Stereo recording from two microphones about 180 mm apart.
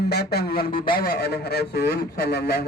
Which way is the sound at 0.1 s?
65° left (ahead or behind).